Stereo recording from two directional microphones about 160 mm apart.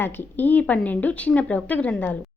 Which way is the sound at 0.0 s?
15° left (ahead or behind).